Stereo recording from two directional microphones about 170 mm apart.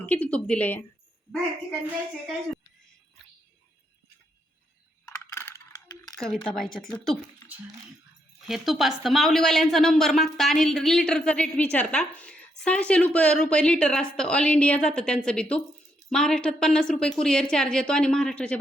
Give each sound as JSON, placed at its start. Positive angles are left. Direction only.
{"t": 0.0, "sound": "a woman's voice", "side_deg": 10}
{"t": 5.0, "sound": "a sound", "side_deg": 15}
{"t": 6.1, "sound": "a woman's voice", "side_deg": 0}
{"t": 8.4, "sound": "a woman's voice", "side_deg": 0}